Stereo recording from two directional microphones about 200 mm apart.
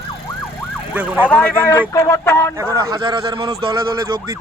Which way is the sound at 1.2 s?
10° left (ahead or behind).